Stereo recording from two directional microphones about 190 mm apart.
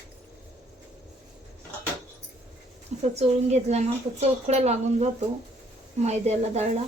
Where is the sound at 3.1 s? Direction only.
35° right (ahead or behind).